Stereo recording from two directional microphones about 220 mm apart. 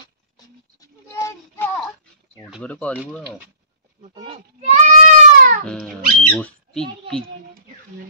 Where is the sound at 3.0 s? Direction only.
5° right (ahead or behind).